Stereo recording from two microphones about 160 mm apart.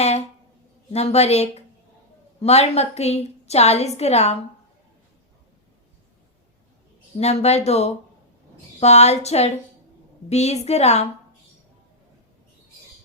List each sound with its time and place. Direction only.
0.9 s a woman's voice: 40° left (ahead or behind)
7.2 s a woman's voice: 40° left (ahead or behind)